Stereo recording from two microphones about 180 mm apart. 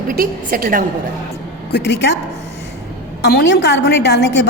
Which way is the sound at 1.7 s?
65° left (ahead or behind).